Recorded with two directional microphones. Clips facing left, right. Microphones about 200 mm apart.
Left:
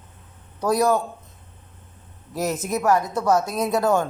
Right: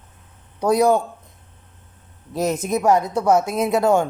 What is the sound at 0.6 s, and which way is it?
Speech, 20° right (ahead or behind).